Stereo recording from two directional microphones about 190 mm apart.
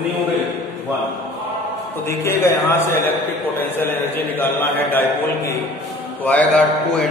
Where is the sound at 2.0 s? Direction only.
15° left (ahead or behind).